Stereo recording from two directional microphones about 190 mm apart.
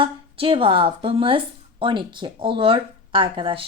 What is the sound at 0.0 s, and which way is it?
Speech, 30° right (ahead or behind).